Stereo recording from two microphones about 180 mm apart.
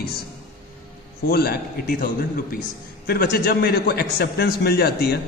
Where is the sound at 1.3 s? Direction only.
60° left (ahead or behind).